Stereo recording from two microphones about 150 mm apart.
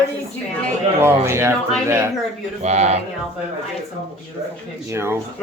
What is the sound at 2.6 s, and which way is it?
Speech, 45° right (ahead or behind).